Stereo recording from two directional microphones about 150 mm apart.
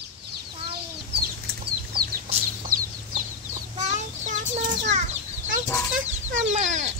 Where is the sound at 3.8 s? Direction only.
55° right (ahead or behind).